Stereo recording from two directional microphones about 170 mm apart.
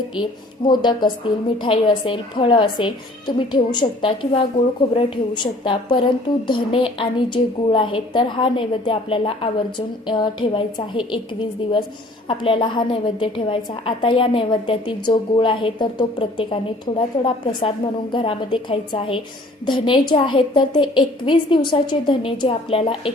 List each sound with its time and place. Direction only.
0.2 s a woman's voice: 25° left (ahead or behind)
12.3 s a woman's voice: 30° left (ahead or behind)